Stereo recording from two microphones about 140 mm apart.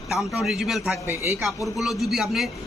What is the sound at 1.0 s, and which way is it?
Speech, 15° right (ahead or behind).